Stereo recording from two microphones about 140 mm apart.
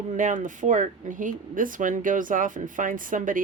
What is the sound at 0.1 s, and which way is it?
Speech, 65° right (ahead or behind).